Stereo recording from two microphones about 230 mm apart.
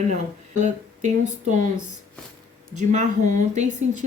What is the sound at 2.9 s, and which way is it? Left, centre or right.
A woman's voice, right.